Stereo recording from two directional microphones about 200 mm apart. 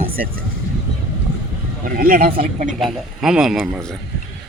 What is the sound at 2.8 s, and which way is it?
Speech, centre (ahead or behind).